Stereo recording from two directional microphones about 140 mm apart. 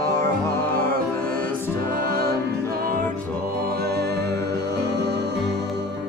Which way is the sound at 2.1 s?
90° right.